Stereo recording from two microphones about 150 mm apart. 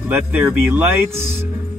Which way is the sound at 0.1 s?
15° right (ahead or behind).